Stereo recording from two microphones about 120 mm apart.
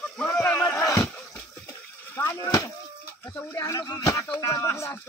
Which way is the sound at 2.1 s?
25° left (ahead or behind).